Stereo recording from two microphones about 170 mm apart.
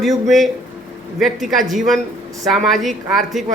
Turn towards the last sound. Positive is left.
turn(degrees=0)  # may be behind; listen again after turning